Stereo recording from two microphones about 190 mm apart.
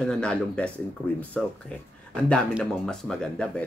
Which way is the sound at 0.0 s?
5° left (ahead or behind).